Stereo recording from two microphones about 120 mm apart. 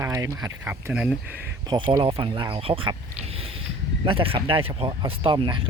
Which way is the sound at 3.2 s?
55° right (ahead or behind).